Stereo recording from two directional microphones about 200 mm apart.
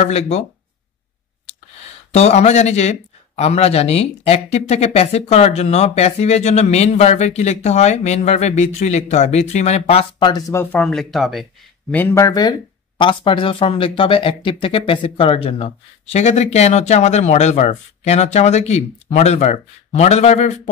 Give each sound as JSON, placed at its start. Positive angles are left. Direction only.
{"t": 0.0, "sound": "speech", "side_deg": 30}
{"t": 2.1, "sound": "speech", "side_deg": 35}
{"t": 11.9, "sound": "speech", "side_deg": 10}